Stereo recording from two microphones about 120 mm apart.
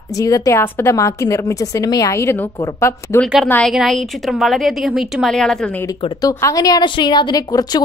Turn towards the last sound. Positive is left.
turn(degrees=30)  # may be behind; listen again after turning